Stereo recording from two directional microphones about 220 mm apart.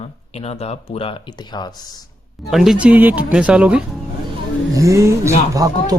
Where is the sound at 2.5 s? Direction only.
Centre (ahead or behind).